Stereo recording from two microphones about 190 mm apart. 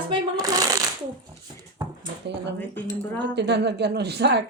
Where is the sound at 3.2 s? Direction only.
65° right (ahead or behind).